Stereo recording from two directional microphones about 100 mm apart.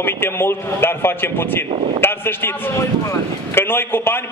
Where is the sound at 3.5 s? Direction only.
20° left (ahead or behind).